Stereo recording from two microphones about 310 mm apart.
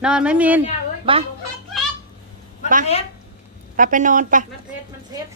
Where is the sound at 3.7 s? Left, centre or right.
Right.